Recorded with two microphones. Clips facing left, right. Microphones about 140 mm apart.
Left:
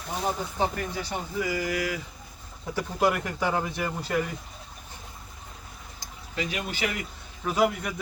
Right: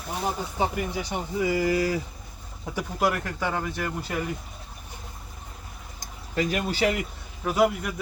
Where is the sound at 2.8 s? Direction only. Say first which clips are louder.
Left 1 dB; centre (ahead or behind).